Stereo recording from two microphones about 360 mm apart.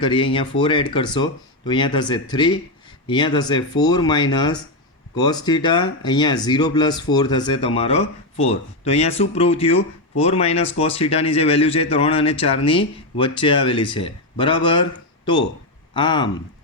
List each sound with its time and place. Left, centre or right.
0.0 s a man's voice: centre